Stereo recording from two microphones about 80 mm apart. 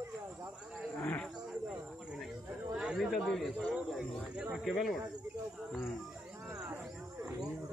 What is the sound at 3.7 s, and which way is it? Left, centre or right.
Speech, centre.